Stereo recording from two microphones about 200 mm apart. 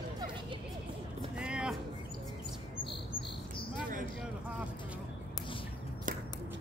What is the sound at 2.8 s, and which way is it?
Bird, 25° left (ahead or behind).